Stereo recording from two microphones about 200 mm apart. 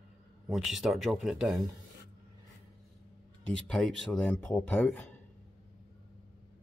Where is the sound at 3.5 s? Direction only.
5° left (ahead or behind).